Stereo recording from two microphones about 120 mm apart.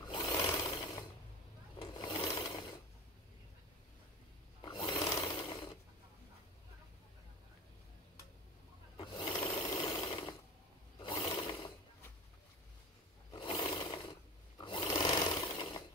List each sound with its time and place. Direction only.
0.1 s sewing machine: 35° left (ahead or behind)
1.8 s a sound: 40° left (ahead or behind)
2.3 s mechanisms: 40° left (ahead or behind)
4.6 s a sound: 40° left (ahead or behind)
5.3 s mechanisms: 40° left (ahead or behind)
8.9 s sewing machine: 45° left (ahead or behind)
11.0 s a sound: 35° left (ahead or behind)
13.3 s roar: 40° left (ahead or behind)
14.6 s sewing machine: 40° left (ahead or behind)